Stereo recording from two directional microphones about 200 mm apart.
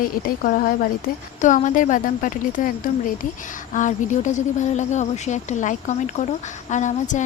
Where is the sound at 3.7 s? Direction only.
40° left (ahead or behind).